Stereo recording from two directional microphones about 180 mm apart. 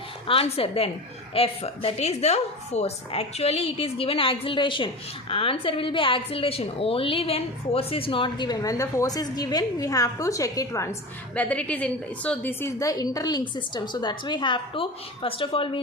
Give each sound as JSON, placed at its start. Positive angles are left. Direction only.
{"t": 0.3, "sound": "a woman's voice", "side_deg": 30}
{"t": 11.3, "sound": "a woman's voice", "side_deg": 5}